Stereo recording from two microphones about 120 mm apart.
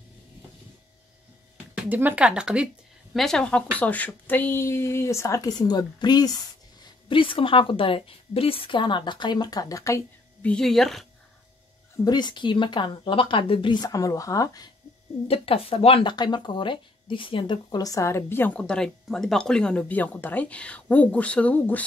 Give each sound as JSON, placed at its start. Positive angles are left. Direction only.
{"t": 1.8, "sound": "speech", "side_deg": -15}
{"t": 3.2, "sound": "a woman's voice", "side_deg": 5}
{"t": 7.1, "sound": "a woman's voice", "side_deg": 45}
{"t": 10.4, "sound": "a woman's voice", "side_deg": 5}
{"t": 12.0, "sound": "a woman's voice", "side_deg": 35}
{"t": 15.2, "sound": "speech", "side_deg": 55}